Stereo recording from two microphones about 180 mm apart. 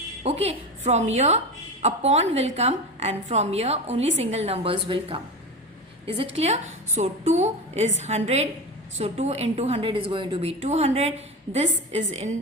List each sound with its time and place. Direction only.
0.2 s a woman's voice: 35° right (ahead or behind)
6.3 s a woman's voice: 35° right (ahead or behind)